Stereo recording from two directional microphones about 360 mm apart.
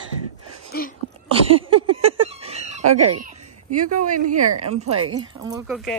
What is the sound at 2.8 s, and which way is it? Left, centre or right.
Speech, right.